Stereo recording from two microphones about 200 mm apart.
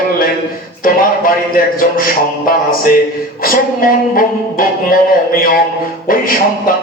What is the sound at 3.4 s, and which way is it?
Speech, 45° left (ahead or behind).